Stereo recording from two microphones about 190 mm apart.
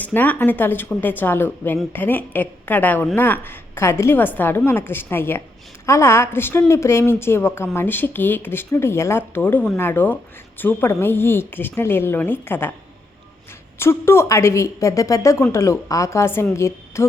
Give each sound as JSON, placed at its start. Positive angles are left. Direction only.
{"t": 0.0, "sound": "a woman's voice", "side_deg": 10}
{"t": 13.7, "sound": "a woman's voice", "side_deg": 15}